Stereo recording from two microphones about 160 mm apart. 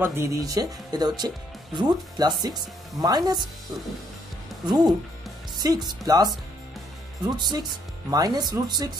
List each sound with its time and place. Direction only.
0.0 s speech: 15° right (ahead or behind)
4.6 s speech: 25° right (ahead or behind)